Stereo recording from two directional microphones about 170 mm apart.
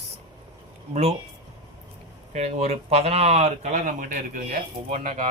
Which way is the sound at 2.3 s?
40° right (ahead or behind).